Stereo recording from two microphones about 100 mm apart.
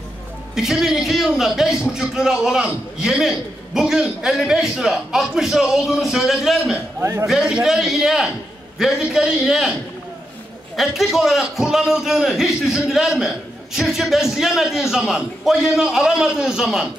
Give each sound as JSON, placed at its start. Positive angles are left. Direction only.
{"t": 0.6, "sound": "a man's voice", "side_deg": -5}
{"t": 7.0, "sound": "a man's voice", "side_deg": -30}
{"t": 7.2, "sound": "a man's voice", "side_deg": -5}
{"t": 10.8, "sound": "a man's voice", "side_deg": -5}